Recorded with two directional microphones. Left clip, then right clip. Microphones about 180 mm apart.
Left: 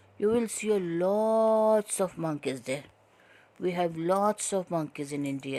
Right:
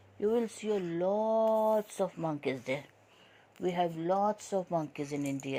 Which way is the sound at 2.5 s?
30° left (ahead or behind).